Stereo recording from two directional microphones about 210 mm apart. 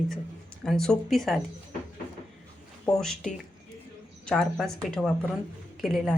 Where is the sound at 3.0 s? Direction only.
Centre (ahead or behind).